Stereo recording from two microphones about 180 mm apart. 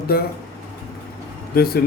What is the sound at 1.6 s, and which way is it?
Speech, 55° left (ahead or behind).